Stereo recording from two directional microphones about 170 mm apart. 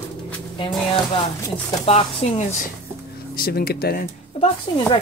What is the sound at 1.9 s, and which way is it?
Speech, 40° left (ahead or behind).